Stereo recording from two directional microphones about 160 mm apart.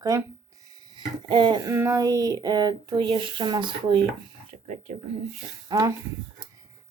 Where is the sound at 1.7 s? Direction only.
15° right (ahead or behind).